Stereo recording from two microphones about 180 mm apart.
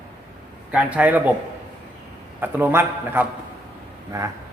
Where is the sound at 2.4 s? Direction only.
10° right (ahead or behind).